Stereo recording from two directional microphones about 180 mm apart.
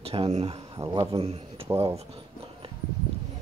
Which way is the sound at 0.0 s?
35° right (ahead or behind).